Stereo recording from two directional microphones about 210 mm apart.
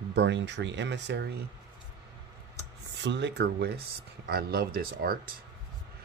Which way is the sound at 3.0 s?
55° right (ahead or behind).